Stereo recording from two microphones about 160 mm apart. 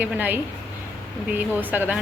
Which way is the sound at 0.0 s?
10° right (ahead or behind).